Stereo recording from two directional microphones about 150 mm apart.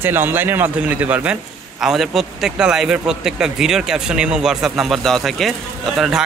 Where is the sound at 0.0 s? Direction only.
15° right (ahead or behind).